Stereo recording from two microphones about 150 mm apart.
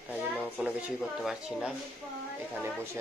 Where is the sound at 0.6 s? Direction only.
5° right (ahead or behind).